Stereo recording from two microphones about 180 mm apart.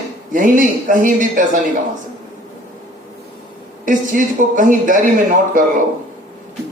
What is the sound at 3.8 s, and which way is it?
Speech, 45° right (ahead or behind).